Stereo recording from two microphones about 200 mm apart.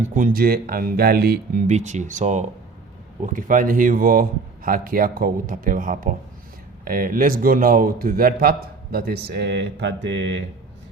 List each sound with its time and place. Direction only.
0.1 s a man's voice: 40° right (ahead or behind); by 10.4 s 65° right (ahead or behind)